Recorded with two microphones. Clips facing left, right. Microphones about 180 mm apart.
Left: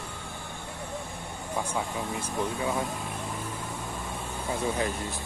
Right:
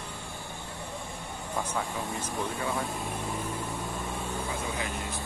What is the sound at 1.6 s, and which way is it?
Speech, 10° left (ahead or behind).